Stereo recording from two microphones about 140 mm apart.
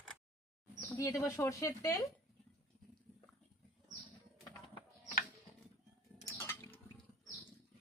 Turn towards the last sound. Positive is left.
turn(degrees=15)  # may be behind; listen again after turning